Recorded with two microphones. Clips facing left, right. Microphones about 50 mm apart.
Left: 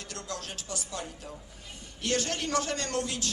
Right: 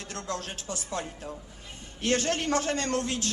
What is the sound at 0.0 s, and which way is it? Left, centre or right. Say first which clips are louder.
A man's voice: right 4 dB; right.